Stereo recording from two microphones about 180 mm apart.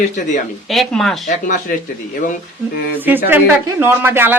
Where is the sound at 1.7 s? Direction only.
50° left (ahead or behind).